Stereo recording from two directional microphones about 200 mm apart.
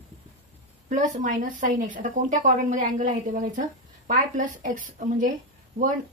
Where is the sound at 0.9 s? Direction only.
40° right (ahead or behind).